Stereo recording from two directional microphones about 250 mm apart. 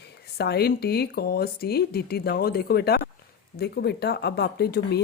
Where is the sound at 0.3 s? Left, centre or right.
Left.